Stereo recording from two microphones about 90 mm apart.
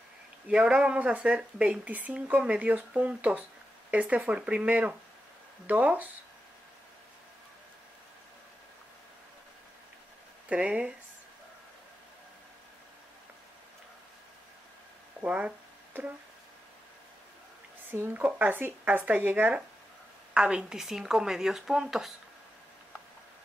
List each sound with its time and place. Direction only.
0.5 s speech: 10° right (ahead or behind)
10.5 s speech: 15° right (ahead or behind)
15.2 s a sound: 15° right (ahead or behind)
17.9 s speech: 25° right (ahead or behind); by 22.1 s 5° right (ahead or behind)